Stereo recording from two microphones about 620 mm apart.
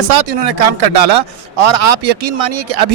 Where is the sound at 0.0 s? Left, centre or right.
Right.